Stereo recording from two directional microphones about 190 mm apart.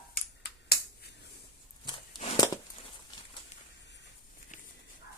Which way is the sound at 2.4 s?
20° left (ahead or behind).